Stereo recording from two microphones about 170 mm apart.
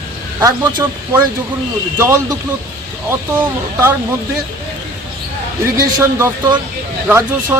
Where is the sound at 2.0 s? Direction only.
15° right (ahead or behind).